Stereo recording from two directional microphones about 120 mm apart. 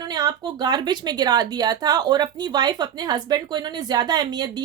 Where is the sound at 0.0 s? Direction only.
35° right (ahead or behind).